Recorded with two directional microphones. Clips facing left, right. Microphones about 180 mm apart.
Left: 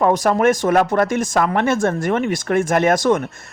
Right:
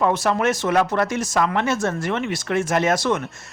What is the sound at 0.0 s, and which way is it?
Speech, 45° left (ahead or behind).